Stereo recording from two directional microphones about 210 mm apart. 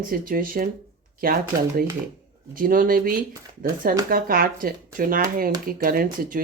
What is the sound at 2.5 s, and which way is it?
Speech, 40° right (ahead or behind).